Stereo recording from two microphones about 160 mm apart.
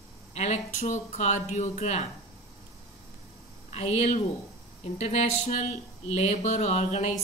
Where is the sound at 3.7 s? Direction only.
40° left (ahead or behind).